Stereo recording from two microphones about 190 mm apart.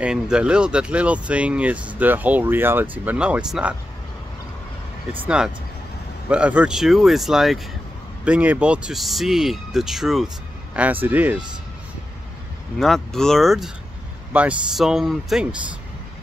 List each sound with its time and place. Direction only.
0.0 s speech: 5° right (ahead or behind)
5.2 s speech: 5° right (ahead or behind)
12.7 s speech: centre (ahead or behind)